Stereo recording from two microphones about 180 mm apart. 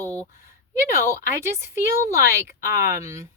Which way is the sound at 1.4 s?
15° right (ahead or behind).